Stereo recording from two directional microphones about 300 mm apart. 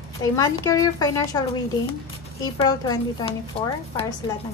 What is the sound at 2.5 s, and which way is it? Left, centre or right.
A woman's voice, centre.